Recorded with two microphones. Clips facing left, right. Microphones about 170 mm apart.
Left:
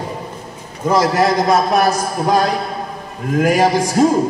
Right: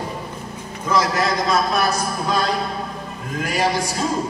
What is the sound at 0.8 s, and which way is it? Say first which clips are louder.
A man's voice: left 6 dB; 45° left (ahead or behind).